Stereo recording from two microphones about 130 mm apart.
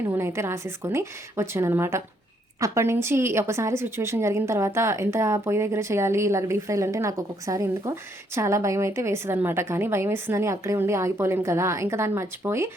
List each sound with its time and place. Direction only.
0.1 s a woman's voice: 20° right (ahead or behind)